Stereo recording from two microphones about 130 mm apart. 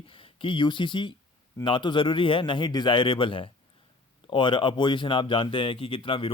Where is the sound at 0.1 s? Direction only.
40° left (ahead or behind).